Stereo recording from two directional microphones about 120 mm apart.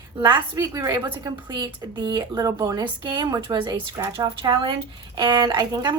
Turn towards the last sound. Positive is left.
turn(degrees=-35)  # may be behind; listen again after turning